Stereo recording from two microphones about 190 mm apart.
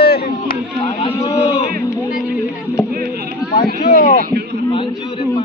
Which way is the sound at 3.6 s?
50° left (ahead or behind).